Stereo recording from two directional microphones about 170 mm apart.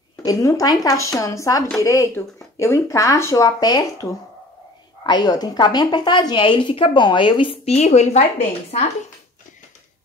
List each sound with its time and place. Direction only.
0.2 s a woman's voice: 20° left (ahead or behind); by 8.3 s 40° left (ahead or behind)